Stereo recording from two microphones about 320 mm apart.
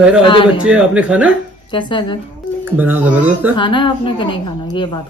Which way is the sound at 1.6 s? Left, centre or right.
Centre.